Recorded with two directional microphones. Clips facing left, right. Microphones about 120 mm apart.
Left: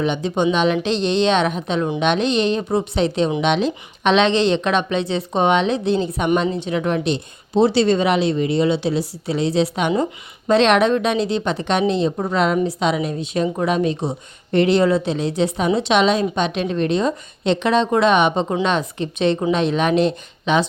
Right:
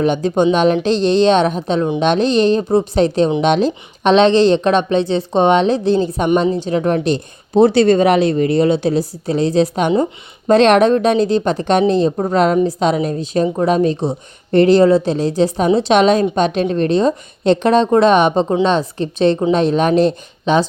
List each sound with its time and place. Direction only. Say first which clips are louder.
0.0 s a woman's voice: right 5 dB; 45° right (ahead or behind)
9.9 s speech: right 4 dB; 25° right (ahead or behind)
10.5 s a woman's voice: right 4 dB; 45° right (ahead or behind)